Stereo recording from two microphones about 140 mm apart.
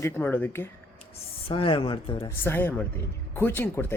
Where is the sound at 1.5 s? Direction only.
40° left (ahead or behind).